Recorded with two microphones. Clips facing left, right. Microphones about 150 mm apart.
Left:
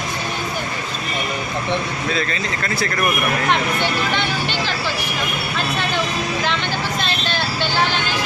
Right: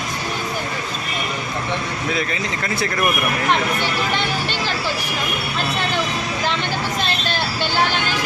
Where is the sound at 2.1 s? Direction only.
15° right (ahead or behind).